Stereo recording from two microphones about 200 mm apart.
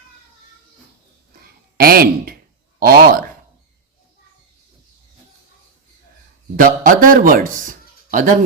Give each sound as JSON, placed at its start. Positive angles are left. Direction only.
{"t": 1.8, "sound": "speech", "side_deg": -50}
{"t": 6.6, "sound": "speech", "side_deg": -45}